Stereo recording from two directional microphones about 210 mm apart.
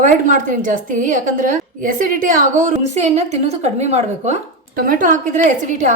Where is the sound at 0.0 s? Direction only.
35° right (ahead or behind).